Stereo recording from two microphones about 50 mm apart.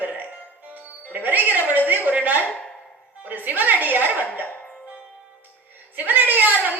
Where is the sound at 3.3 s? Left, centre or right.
Right.